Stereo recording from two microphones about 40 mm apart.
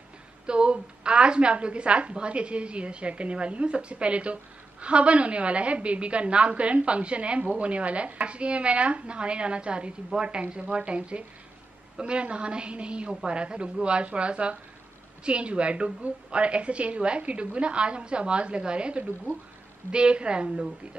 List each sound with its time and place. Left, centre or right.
0.5 s a woman's voice: right